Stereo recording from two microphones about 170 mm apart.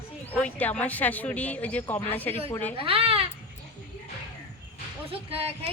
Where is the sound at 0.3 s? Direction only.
10° left (ahead or behind).